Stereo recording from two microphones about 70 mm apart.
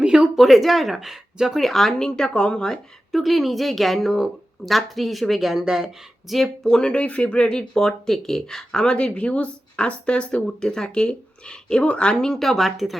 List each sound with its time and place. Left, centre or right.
0.0 s speech: centre